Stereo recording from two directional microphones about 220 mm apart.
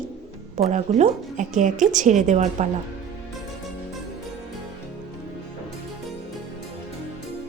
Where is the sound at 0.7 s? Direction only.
30° right (ahead or behind).